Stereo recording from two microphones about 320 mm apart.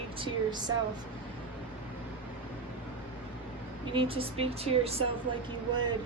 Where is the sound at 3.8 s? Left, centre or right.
Centre.